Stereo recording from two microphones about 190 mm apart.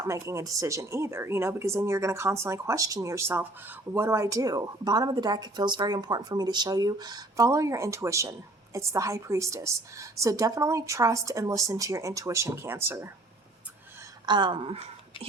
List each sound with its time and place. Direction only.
0.0 s speech: 15° right (ahead or behind)
14.3 s speech: 25° right (ahead or behind)